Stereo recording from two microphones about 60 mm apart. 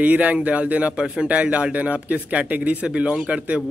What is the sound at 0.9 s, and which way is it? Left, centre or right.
Speech, centre.